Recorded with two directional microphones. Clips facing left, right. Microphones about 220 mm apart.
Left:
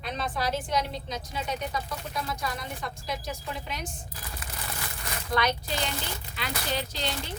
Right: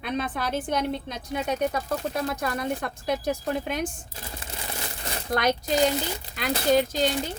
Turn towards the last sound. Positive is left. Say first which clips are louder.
# right 9 dB
turn(degrees=-45)  # may be behind; listen again after turning